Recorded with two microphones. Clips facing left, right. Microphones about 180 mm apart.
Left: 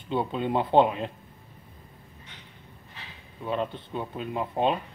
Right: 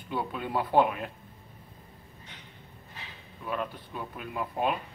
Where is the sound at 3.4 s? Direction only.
25° left (ahead or behind).